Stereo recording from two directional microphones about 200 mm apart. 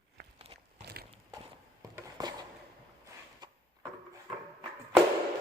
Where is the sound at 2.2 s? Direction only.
20° right (ahead or behind).